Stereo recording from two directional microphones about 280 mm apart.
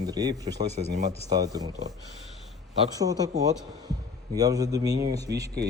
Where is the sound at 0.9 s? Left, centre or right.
Right.